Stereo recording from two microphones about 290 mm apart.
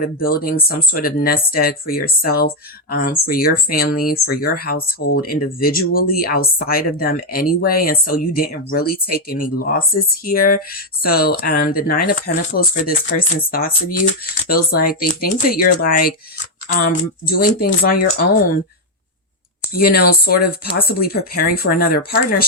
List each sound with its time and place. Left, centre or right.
0.0 s speech: left
19.7 s speech: left